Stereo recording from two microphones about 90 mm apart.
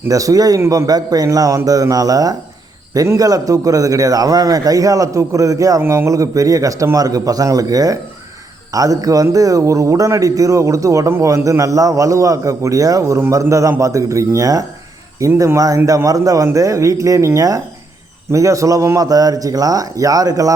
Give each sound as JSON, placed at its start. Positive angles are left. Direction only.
{"t": 0.1, "sound": "a man's voice", "side_deg": -40}
{"t": 5.8, "sound": "speech", "side_deg": -25}
{"t": 6.1, "sound": "a man's voice", "side_deg": -40}